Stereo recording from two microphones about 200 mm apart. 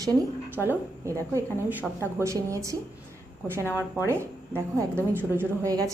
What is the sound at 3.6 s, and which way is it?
Speech, 15° left (ahead or behind).